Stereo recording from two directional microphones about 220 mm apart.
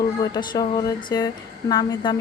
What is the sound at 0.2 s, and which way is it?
Speech, 20° left (ahead or behind).